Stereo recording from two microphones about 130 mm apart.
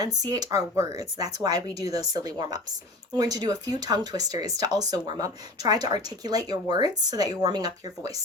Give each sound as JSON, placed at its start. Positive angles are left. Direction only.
{"t": 0.2, "sound": "speech", "side_deg": -30}